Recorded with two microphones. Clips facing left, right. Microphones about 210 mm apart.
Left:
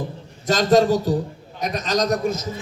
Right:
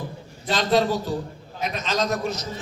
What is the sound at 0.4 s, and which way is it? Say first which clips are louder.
A man's voice: left 5 dB; 45° left (ahead or behind).